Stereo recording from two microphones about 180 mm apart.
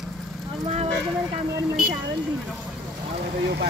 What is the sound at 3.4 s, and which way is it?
Vehicle, 65° right (ahead or behind).